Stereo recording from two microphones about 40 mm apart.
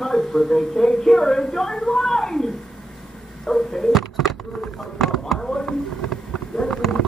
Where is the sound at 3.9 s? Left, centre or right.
Centre.